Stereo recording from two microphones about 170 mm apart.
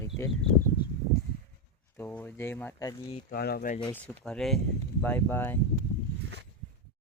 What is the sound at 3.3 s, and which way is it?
Speech, 65° left (ahead or behind).